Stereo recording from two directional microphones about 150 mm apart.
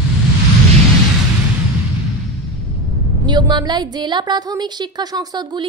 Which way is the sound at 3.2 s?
30° right (ahead or behind).